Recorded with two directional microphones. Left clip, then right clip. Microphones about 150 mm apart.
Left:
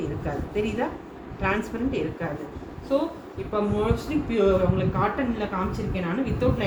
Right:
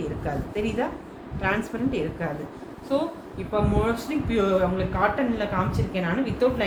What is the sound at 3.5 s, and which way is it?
Speech, 40° right (ahead or behind).